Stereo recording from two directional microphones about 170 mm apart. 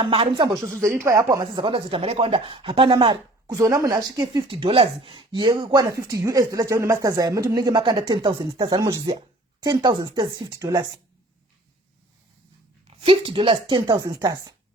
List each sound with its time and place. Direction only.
0.0 s speech: 30° right (ahead or behind)
12.9 s speech: 35° right (ahead or behind)